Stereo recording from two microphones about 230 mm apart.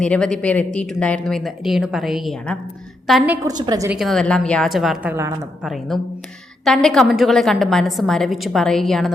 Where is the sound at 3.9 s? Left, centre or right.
Centre.